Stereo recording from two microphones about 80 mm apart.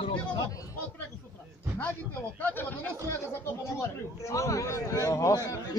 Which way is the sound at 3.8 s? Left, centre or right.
Left.